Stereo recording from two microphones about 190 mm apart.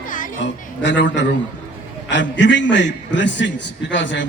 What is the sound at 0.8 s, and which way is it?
A man's voice, 70° left (ahead or behind).